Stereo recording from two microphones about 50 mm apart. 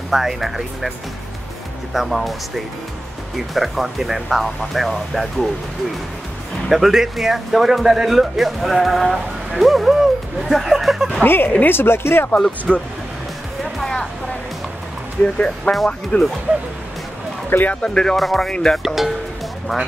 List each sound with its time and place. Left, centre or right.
0.1 s speech: centre
2.0 s speech: centre
6.7 s speech: centre
11.2 s speech: left
12.4 s speech: centre
13.7 s music: centre
15.2 s speech: left
17.5 s speech: left
17.8 s speech: centre
18.5 s speech: centre